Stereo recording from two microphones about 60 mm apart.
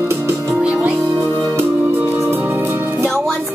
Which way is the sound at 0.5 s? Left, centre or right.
Right.